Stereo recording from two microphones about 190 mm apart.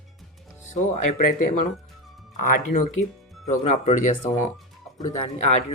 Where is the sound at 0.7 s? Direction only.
40° left (ahead or behind).